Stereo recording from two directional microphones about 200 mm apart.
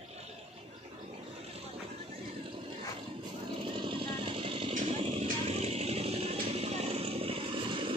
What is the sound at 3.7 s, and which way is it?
Vehicle, 25° right (ahead or behind).